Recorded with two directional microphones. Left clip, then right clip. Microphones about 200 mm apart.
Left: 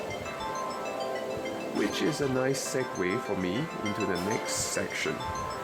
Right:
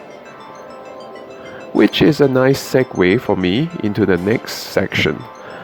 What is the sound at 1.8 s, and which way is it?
Speech, 40° right (ahead or behind).